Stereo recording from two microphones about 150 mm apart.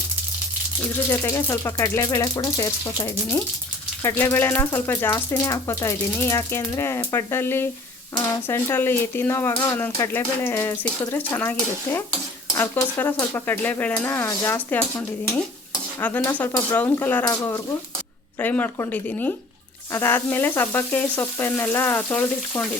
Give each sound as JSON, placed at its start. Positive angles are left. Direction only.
{"t": 1.2, "sound": "speech", "side_deg": 20}
{"t": 16.0, "sound": "speech", "side_deg": 15}